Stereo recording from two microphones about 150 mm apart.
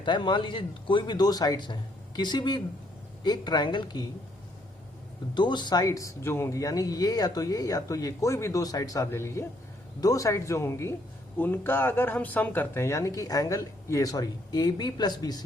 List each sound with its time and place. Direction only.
0.0 s speech: 30° left (ahead or behind)
5.3 s speech: 30° left (ahead or behind)